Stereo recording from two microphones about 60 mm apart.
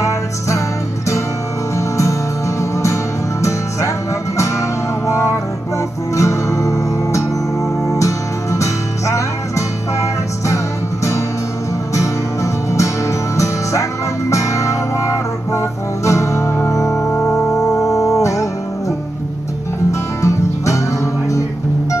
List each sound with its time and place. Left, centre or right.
1.8 s music: left
4.4 s music: left
6.1 s music: left
12.7 s music: left
17.2 s music: centre
17.7 s music: left
19.9 s music: left